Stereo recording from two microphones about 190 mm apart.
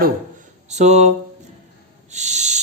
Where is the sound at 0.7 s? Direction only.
35° right (ahead or behind).